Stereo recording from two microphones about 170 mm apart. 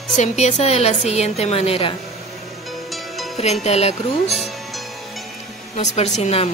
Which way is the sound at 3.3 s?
40° left (ahead or behind).